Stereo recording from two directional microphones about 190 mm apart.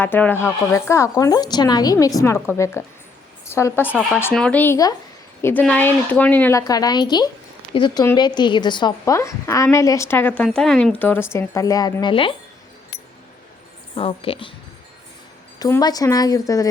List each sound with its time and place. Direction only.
0.0 s a woman's voice: 10° left (ahead or behind); by 12.3 s 25° left (ahead or behind)
13.9 s speech: 30° left (ahead or behind)
15.5 s speech: 20° left (ahead or behind)